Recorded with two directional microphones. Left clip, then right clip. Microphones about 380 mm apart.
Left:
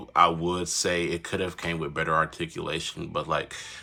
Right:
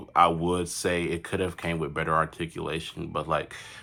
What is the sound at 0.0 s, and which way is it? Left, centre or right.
Speech, centre.